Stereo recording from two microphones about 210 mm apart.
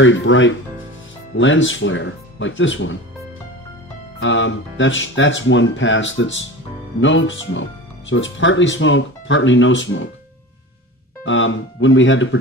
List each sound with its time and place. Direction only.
0.0 s speech: 65° left (ahead or behind)
4.2 s speech: 65° left (ahead or behind)
11.2 s speech: 65° left (ahead or behind)